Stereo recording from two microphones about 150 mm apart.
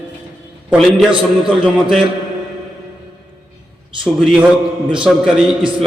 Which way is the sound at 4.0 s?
5° right (ahead or behind).